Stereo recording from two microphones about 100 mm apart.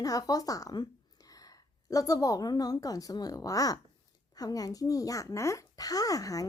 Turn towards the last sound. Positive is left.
turn(degrees=35)  # may be behind; listen again after turning